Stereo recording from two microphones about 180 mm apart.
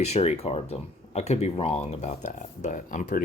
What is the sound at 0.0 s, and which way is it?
Speech, 35° left (ahead or behind).